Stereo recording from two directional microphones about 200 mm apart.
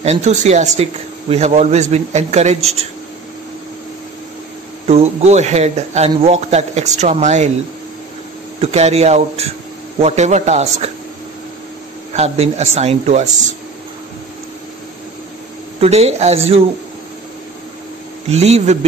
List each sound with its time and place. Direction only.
0.0 s a man's voice: 35° right (ahead or behind)
4.8 s a man's voice: 30° right (ahead or behind)
8.5 s a man's voice: 30° right (ahead or behind)
12.1 s a man's voice: 30° right (ahead or behind)
15.8 s a man's voice: 30° right (ahead or behind)
18.3 s a man's voice: 35° right (ahead or behind)